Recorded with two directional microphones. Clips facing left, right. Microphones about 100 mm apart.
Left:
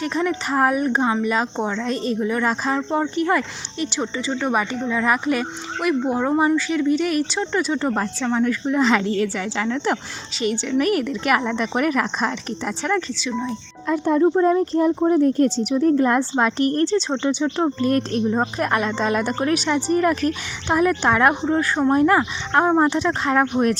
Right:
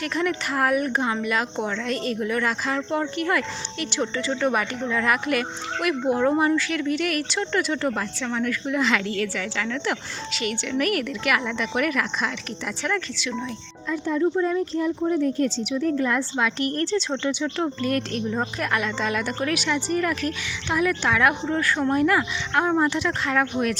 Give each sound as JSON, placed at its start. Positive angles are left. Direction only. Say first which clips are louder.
{"t": 0.0, "sound": "speech", "louder": "left 3 dB", "side_deg": 25}
{"t": 7.9, "sound": "speech", "louder": "left 6 dB", "side_deg": 30}
{"t": 12.9, "sound": "speech", "louder": "left 5 dB", "side_deg": 25}
{"t": 13.8, "sound": "speech", "louder": "left 6 dB", "side_deg": 55}